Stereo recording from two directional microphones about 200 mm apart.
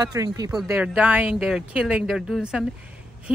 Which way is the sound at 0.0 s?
20° right (ahead or behind).